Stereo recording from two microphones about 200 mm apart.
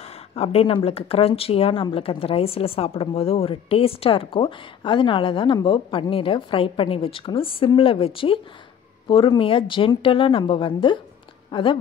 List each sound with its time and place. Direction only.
0.4 s speech: 30° left (ahead or behind)